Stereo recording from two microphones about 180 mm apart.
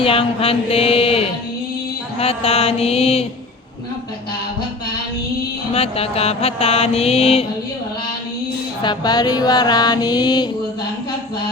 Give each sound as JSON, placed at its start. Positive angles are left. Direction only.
{"t": 0.0, "sound": "mantra", "side_deg": 30}
{"t": 5.7, "sound": "mantra", "side_deg": 35}
{"t": 8.8, "sound": "music", "side_deg": 25}